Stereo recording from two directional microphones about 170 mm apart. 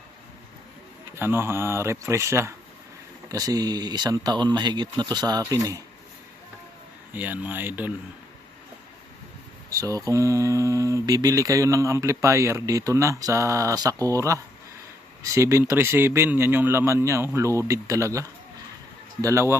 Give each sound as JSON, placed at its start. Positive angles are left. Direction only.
{"t": 1.1, "sound": "speech", "side_deg": -15}
{"t": 7.1, "sound": "speech", "side_deg": -10}
{"t": 9.6, "sound": "speech", "side_deg": -20}